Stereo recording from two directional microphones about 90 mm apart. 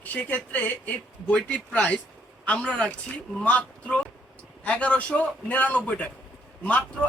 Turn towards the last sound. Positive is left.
turn(degrees=15)  # may be behind; listen again after turning